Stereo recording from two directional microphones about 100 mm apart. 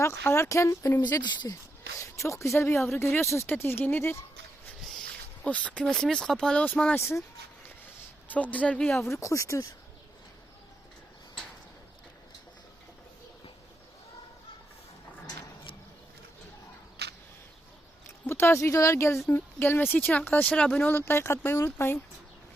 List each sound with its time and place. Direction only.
0.0 s speech: 25° left (ahead or behind)
1.2 s speech: 50° left (ahead or behind)
2.0 s speech: 30° left (ahead or behind)
5.4 s speech: 15° left (ahead or behind)
6.9 s speech: 25° left (ahead or behind)
8.3 s speech: 15° left (ahead or behind)
9.0 s speech: 30° left (ahead or behind)
18.3 s speech: 25° left (ahead or behind); by 20.9 s 10° left (ahead or behind)
20.9 s speech: 25° left (ahead or behind)